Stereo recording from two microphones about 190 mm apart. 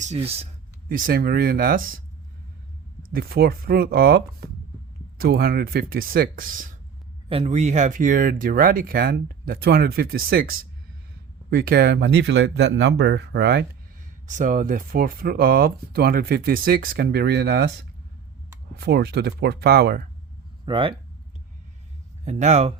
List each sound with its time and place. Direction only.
0.0 s speech: 35° right (ahead or behind)
0.9 s speech: 50° right (ahead or behind)
3.0 s speech: 50° right (ahead or behind)
7.3 s speech: 35° right (ahead or behind); by 13.7 s 60° right (ahead or behind)
14.3 s speech: 45° right (ahead or behind); by 17.7 s 60° right (ahead or behind)
18.7 s speech: 60° right (ahead or behind)
20.7 s speech: 25° right (ahead or behind)
22.2 s speech: 40° right (ahead or behind)